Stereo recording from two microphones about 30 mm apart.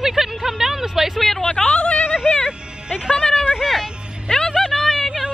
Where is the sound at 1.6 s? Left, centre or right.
Left.